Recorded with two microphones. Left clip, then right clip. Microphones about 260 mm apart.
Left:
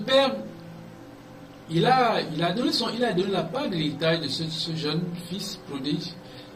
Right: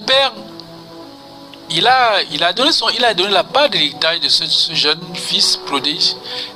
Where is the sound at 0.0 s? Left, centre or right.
Right.